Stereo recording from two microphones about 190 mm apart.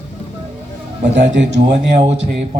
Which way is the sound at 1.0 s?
65° right (ahead or behind).